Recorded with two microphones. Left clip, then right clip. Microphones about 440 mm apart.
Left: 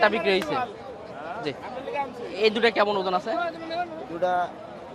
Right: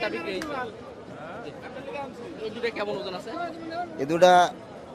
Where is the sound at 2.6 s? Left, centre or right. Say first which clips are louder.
Left 8 dB; left.